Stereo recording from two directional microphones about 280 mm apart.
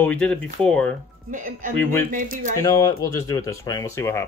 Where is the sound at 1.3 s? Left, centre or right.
Right.